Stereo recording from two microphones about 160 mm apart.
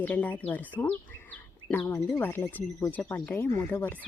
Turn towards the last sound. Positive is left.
turn(degrees=10)  # may be behind; listen again after turning